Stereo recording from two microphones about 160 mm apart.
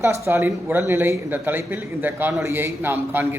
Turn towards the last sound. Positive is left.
turn(degrees=-15)  # may be behind; listen again after turning